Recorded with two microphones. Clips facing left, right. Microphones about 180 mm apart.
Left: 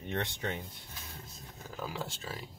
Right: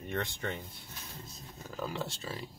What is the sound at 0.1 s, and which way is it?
Speech, 15° left (ahead or behind).